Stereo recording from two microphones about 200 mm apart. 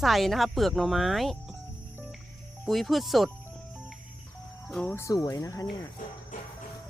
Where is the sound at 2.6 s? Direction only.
Centre (ahead or behind).